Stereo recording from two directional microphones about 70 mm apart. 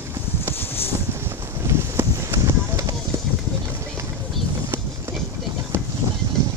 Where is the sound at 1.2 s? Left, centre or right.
Right.